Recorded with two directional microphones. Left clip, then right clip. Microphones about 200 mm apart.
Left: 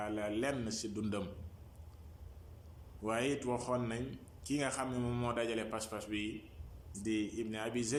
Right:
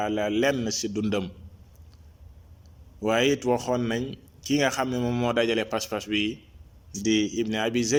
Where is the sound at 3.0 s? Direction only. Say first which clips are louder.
Right 13 dB; 40° right (ahead or behind).